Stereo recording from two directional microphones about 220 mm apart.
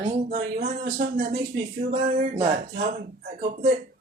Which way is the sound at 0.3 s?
35° right (ahead or behind).